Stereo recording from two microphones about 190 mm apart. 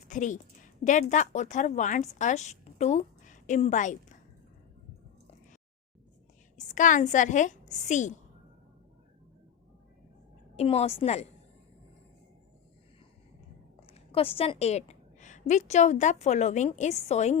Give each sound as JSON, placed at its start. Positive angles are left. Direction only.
{"t": 0.1, "sound": "a woman's voice", "side_deg": 40}
{"t": 6.6, "sound": "a woman's voice", "side_deg": 40}
{"t": 10.6, "sound": "a woman's voice", "side_deg": 30}
{"t": 13.8, "sound": "a woman's voice", "side_deg": 30}